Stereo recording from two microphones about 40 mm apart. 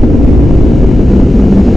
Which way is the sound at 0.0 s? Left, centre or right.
Centre.